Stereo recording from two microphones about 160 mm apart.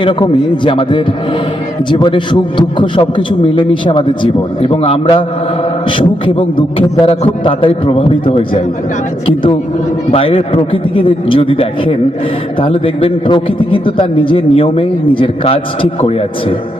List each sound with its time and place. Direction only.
0.0 s a man's voice: 30° left (ahead or behind)